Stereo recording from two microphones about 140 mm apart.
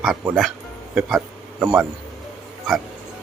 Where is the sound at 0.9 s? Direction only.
5° right (ahead or behind).